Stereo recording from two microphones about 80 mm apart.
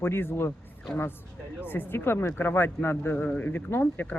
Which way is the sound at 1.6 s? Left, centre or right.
Left.